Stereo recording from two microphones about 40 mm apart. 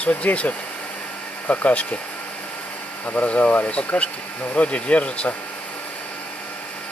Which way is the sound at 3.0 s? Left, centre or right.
Left.